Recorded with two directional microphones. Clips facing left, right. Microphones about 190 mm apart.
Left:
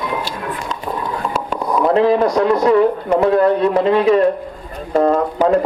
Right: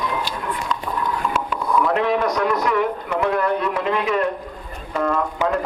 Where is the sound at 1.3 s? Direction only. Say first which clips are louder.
Left 3 dB; 35° left (ahead or behind).